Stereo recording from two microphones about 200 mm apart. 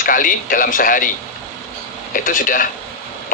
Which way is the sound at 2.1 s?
45° left (ahead or behind).